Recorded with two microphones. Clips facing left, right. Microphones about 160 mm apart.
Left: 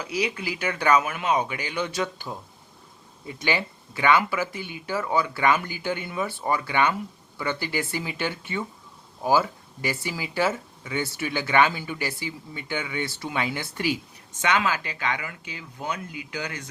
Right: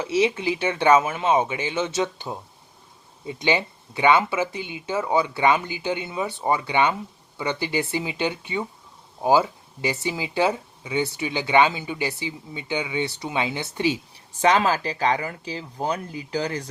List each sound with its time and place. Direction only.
0.0 s speech: 25° right (ahead or behind)
14.4 s speech: 35° right (ahead or behind)